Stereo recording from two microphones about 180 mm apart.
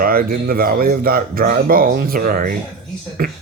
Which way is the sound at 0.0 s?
55° right (ahead or behind).